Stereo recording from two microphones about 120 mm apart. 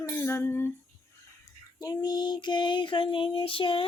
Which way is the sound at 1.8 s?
35° left (ahead or behind).